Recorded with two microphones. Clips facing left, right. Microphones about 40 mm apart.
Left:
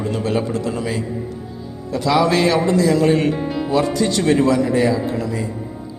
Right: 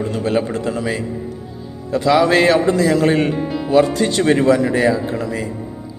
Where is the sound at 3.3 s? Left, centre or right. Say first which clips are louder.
Right 1 dB; centre.